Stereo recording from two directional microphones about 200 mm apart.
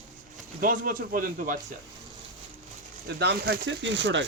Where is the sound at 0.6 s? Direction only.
45° right (ahead or behind).